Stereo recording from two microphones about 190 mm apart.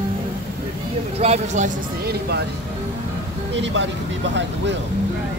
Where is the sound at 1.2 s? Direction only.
35° right (ahead or behind).